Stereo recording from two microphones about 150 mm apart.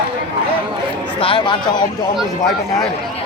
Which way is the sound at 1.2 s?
35° left (ahead or behind).